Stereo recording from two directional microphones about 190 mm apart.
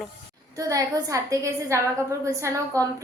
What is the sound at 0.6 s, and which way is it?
A woman's voice, 15° right (ahead or behind).